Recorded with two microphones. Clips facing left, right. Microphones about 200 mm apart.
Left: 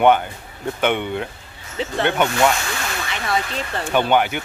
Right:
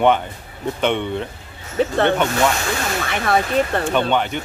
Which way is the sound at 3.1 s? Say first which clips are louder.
Right 6 dB; 55° right (ahead or behind).